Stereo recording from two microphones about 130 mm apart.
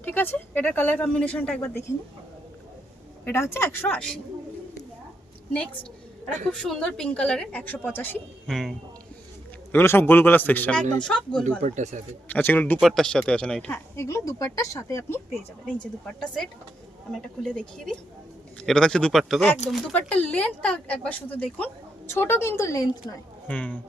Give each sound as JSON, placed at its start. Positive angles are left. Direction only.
{"t": 0.0, "sound": "speech", "side_deg": 15}
{"t": 3.2, "sound": "speech", "side_deg": 20}
{"t": 6.5, "sound": "speech", "side_deg": 5}
{"t": 8.4, "sound": "speech", "side_deg": 0}
{"t": 9.7, "sound": "speech", "side_deg": 15}
{"t": 11.6, "sound": "speech", "side_deg": -65}
{"t": 12.3, "sound": "speech", "side_deg": 15}
{"t": 12.8, "sound": "speech", "side_deg": 0}
{"t": 15.8, "sound": "speech", "side_deg": 5}
{"t": 23.5, "sound": "speech", "side_deg": 10}